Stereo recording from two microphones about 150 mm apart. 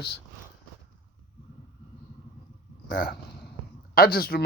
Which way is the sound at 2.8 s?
75° left (ahead or behind).